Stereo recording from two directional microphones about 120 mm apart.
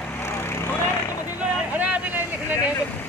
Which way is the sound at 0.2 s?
20° left (ahead or behind).